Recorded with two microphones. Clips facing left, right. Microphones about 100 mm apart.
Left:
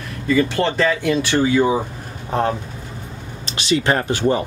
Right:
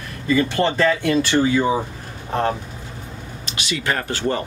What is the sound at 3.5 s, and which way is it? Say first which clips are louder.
Speech: left 6 dB; 30° left (ahead or behind).